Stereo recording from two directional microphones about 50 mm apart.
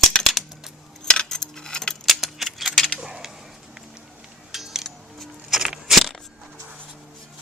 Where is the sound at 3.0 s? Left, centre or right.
Centre.